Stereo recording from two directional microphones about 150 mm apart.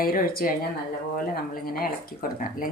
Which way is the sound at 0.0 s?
75° left (ahead or behind).